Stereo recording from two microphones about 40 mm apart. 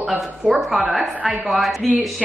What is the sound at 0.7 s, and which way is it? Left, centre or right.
A woman's voice, centre.